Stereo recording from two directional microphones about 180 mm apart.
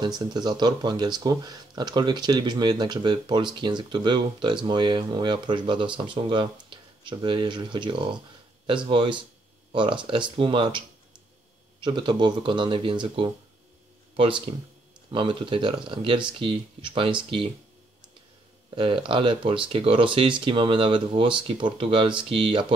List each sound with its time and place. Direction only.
0.3 s speech: 25° right (ahead or behind)
11.8 s speech: 25° right (ahead or behind)
18.8 s speech: 30° right (ahead or behind)